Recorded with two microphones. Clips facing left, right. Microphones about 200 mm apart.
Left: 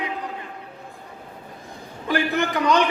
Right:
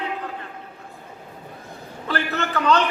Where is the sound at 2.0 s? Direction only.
15° left (ahead or behind).